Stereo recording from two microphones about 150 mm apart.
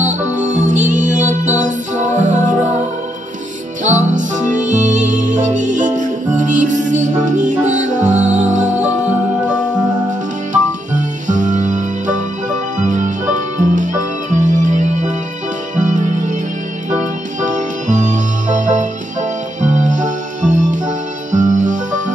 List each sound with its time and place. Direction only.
0.0 s music: 55° right (ahead or behind)
3.8 s music: 55° right (ahead or behind)
8.2 s music: 10° right (ahead or behind)
8.5 s music: 55° right (ahead or behind)
10.5 s music: 55° right (ahead or behind)
17.4 s music: 55° right (ahead or behind)